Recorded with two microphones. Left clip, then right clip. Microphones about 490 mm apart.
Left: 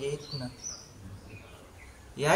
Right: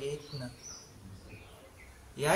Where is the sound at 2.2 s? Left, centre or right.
Right.